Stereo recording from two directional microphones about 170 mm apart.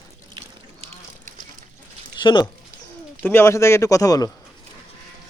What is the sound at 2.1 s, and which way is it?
Speech, 25° left (ahead or behind).